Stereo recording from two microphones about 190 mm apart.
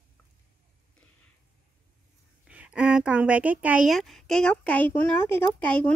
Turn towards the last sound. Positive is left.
turn(degrees=5)  # may be behind; listen again after turning